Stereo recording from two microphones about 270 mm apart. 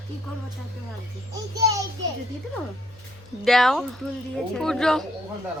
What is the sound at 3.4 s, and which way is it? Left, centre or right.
Speech, centre.